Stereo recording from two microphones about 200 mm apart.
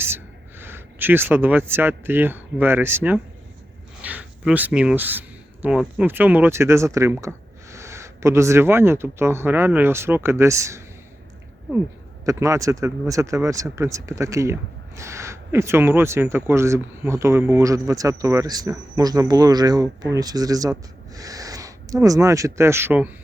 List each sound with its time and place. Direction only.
0.6 s speech: 10° right (ahead or behind)
12.2 s speech: 15° right (ahead or behind)